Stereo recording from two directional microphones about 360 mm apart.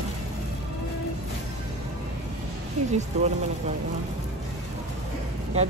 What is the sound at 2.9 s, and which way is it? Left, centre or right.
Speech, centre.